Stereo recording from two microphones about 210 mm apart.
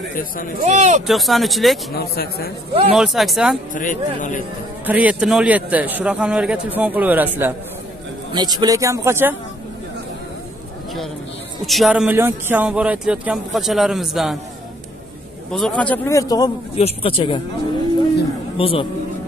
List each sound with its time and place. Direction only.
0.6 s speech: 35° right (ahead or behind)
1.0 s speech: centre (ahead or behind)
2.0 s a man's voice: 50° left (ahead or behind)
2.9 s speech: centre (ahead or behind)
3.7 s speech: 40° left (ahead or behind)
4.8 s a man's voice: 5° right (ahead or behind)
8.3 s a man's voice: 20° right (ahead or behind)
11.6 s speech: centre (ahead or behind)
15.5 s speech: 5° left (ahead or behind); by 17.4 s 25° left (ahead or behind)
18.6 s speech: 25° left (ahead or behind)